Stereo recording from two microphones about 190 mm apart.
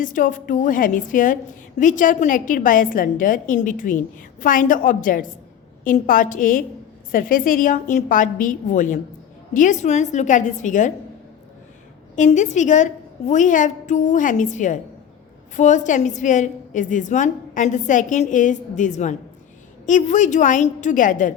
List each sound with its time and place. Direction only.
0.0 s a woman's voice: 45° left (ahead or behind)
12.1 s a woman's voice: 40° left (ahead or behind)